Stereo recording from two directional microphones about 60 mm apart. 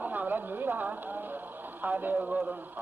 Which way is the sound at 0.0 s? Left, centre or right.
Right.